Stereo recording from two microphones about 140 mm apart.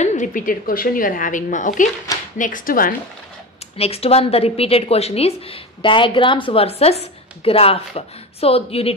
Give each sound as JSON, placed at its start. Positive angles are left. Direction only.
{"t": 0.0, "sound": "a woman's voice", "side_deg": 60}
{"t": 3.7, "sound": "speech", "side_deg": 45}